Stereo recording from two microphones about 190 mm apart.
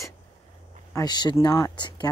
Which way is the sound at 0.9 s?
20° left (ahead or behind).